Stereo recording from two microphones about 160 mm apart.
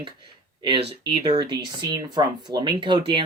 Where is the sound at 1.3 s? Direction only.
25° right (ahead or behind).